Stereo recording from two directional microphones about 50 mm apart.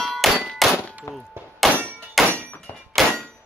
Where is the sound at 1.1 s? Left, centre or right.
Left.